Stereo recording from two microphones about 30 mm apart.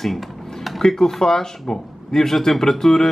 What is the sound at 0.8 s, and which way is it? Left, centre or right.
Speech, left.